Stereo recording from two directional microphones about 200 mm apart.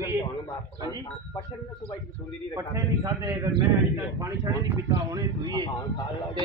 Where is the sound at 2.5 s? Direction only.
15° right (ahead or behind).